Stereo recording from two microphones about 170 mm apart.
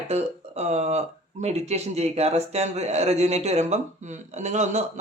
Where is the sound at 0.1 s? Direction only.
40° right (ahead or behind).